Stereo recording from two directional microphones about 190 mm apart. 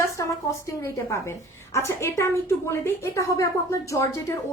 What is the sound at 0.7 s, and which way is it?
A woman's voice, 15° left (ahead or behind).